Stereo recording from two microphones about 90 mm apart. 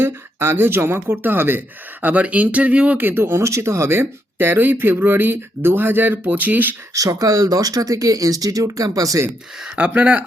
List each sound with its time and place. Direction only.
0.0 s speech: 25° right (ahead or behind)
6.9 s speech: 40° right (ahead or behind)
9.7 s speech: 15° right (ahead or behind)